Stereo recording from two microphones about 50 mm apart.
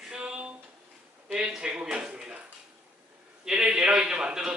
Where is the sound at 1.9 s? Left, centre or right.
Centre.